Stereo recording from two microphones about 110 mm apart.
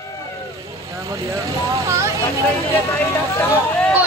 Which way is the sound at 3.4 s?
10° left (ahead or behind).